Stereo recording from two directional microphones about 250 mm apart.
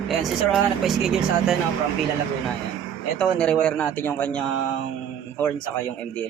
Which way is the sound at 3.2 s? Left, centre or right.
Centre.